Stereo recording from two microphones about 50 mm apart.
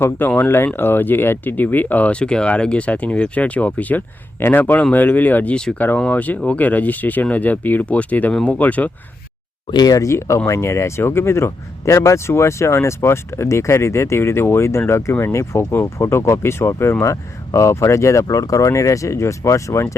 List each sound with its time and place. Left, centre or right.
0.3 s speech: left
4.4 s speech: left
4.6 s speech: left
10.0 s speech: left